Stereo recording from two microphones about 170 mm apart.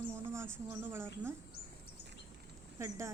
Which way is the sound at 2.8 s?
15° right (ahead or behind).